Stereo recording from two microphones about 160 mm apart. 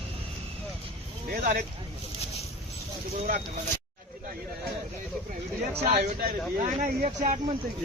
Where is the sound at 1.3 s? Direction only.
60° right (ahead or behind).